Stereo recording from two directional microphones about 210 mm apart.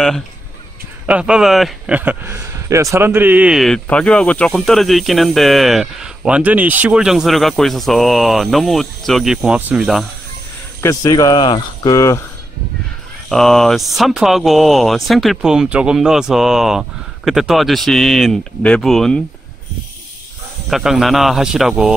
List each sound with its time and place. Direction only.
1.0 s a man's voice: 5° right (ahead or behind)
10.8 s speech: 15° left (ahead or behind)
13.3 s a man's voice: centre (ahead or behind)
20.7 s a man's voice: centre (ahead or behind)